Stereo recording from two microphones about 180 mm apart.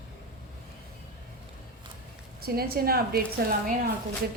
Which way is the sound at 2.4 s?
60° right (ahead or behind).